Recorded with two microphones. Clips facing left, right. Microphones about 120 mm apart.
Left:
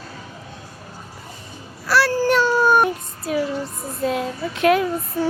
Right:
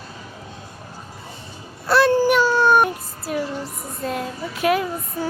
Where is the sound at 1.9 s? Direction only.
25° right (ahead or behind).